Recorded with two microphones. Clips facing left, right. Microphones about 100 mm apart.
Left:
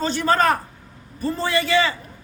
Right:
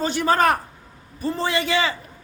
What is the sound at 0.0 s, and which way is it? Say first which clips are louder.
A man's voice: even; 15° right (ahead or behind).